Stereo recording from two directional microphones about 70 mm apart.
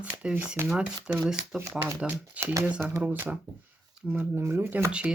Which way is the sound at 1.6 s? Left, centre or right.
Right.